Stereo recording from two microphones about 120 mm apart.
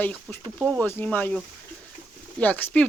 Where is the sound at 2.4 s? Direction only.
15° left (ahead or behind).